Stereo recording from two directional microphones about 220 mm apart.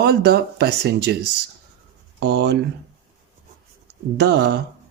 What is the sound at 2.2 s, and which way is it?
Speech, 50° right (ahead or behind).